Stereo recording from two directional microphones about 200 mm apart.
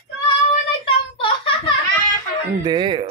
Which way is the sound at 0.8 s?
25° left (ahead or behind).